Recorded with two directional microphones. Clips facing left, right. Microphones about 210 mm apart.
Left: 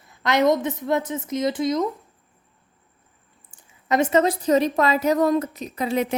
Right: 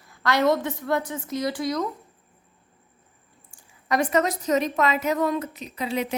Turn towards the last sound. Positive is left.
turn(degrees=50)  # may be behind; listen again after turning